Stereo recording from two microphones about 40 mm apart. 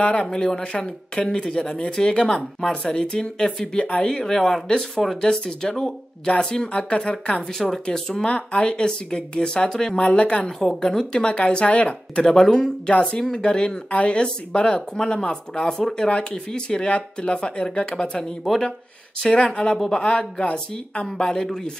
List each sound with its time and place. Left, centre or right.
0.0 s speech: left
0.3 s speech: centre
6.7 s speech: left
8.3 s speech: left
8.5 s speech: left
12.2 s speech: centre
19.4 s speech: left